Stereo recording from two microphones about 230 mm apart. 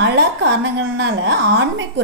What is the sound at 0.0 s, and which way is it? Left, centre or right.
A woman's voice, right.